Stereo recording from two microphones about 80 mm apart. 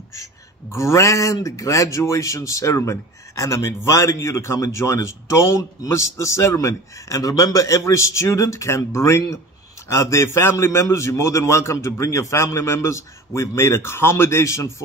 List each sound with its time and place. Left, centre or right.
0.1 s speech: left